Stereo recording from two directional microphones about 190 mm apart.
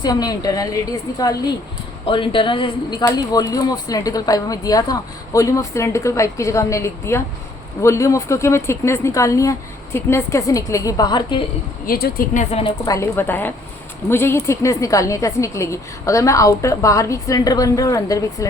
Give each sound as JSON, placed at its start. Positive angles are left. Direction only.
{"t": 0.0, "sound": "a woman's voice", "side_deg": 20}
{"t": 11.9, "sound": "speech", "side_deg": 50}
{"t": 12.8, "sound": "a woman's voice", "side_deg": 15}